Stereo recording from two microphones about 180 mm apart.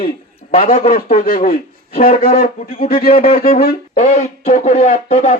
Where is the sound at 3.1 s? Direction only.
35° left (ahead or behind).